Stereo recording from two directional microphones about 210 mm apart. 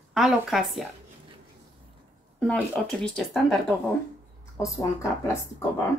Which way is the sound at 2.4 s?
5° left (ahead or behind).